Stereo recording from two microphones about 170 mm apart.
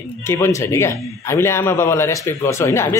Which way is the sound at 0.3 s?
15° left (ahead or behind).